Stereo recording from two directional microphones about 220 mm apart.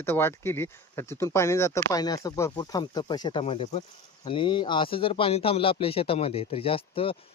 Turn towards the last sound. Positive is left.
turn(degrees=25)  # may be behind; listen again after turning